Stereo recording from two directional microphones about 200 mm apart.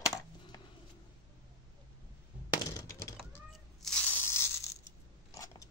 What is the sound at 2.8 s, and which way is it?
Fowl, 15° left (ahead or behind).